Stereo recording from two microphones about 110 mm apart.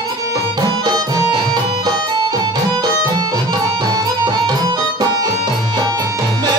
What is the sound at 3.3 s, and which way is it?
Music, 35° right (ahead or behind).